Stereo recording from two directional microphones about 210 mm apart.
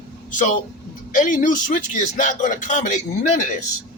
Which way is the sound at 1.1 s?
40° left (ahead or behind).